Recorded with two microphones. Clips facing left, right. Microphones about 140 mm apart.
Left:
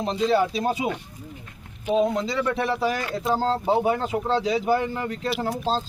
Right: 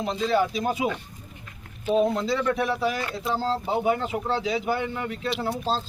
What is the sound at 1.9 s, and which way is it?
Speech, 15° left (ahead or behind).